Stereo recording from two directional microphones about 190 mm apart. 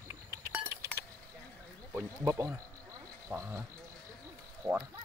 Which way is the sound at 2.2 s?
15° right (ahead or behind).